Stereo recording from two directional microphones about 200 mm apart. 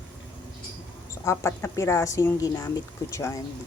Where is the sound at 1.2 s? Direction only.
15° left (ahead or behind).